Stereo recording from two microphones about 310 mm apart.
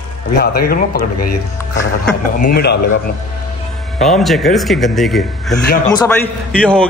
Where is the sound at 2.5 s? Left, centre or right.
Left.